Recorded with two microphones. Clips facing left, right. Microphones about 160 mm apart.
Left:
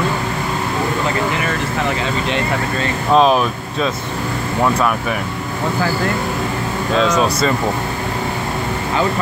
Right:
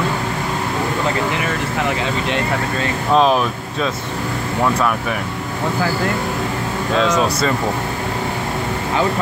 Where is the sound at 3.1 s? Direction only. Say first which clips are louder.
Left 2 dB; 15° left (ahead or behind).